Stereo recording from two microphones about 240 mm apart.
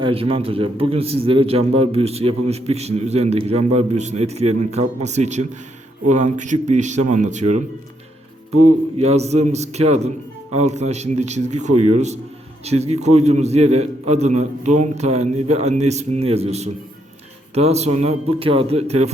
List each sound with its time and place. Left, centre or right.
0.0 s a man's voice: right
9.0 s a man's voice: right